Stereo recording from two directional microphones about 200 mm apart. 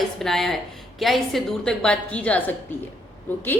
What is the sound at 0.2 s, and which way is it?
A woman's voice, centre (ahead or behind).